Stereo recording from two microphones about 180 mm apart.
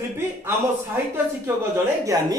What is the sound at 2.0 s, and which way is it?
Speech, 20° right (ahead or behind).